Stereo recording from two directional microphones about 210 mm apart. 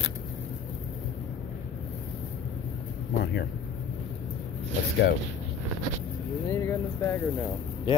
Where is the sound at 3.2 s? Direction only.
50° left (ahead or behind).